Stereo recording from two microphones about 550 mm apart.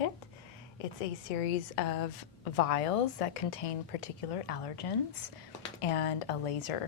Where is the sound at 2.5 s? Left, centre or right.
Left.